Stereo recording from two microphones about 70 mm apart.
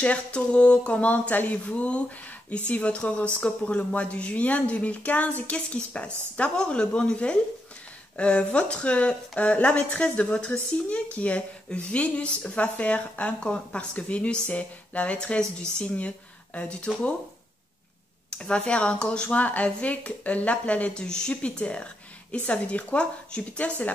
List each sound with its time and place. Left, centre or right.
0.0 s speech: centre
18.3 s speech: centre